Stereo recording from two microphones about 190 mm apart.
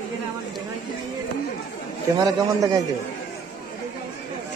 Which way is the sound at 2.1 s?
20° right (ahead or behind).